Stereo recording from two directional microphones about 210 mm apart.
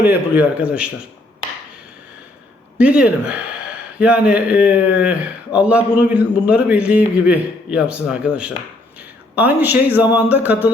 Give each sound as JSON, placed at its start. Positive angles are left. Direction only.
{"t": 0.0, "sound": "speech", "side_deg": -10}
{"t": 2.7, "sound": "a man's voice", "side_deg": -5}